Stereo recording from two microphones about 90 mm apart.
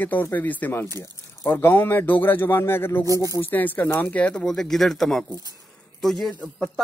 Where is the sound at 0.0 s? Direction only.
20° left (ahead or behind).